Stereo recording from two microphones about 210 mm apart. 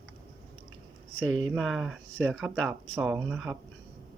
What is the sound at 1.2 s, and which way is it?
Speech, 70° right (ahead or behind).